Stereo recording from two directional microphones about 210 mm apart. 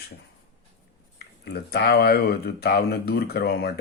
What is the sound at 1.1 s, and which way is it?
Speech, 50° left (ahead or behind).